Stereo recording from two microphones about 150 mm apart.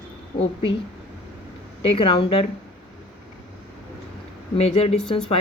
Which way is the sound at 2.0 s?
35° left (ahead or behind).